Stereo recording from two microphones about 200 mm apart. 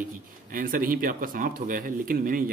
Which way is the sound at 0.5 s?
45° right (ahead or behind).